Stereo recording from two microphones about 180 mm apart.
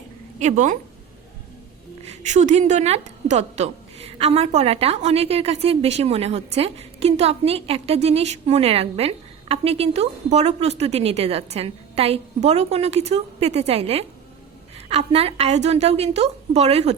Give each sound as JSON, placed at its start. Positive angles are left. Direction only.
{"t": 0.3, "sound": "a woman's voice", "side_deg": -40}
{"t": 2.0, "sound": "a woman's voice", "side_deg": -40}